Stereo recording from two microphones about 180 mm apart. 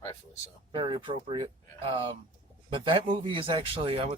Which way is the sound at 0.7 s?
25° right (ahead or behind).